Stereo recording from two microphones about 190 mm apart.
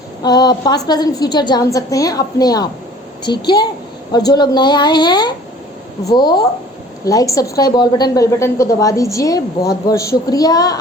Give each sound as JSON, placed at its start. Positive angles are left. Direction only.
{"t": 0.2, "sound": "a woman's voice", "side_deg": 20}